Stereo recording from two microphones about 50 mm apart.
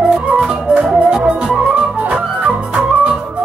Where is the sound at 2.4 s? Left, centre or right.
Right.